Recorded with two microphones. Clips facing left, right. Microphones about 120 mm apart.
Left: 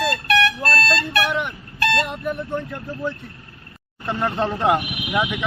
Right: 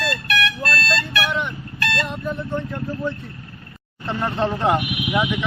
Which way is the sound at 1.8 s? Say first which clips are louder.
Left 4 dB; 25° left (ahead or behind).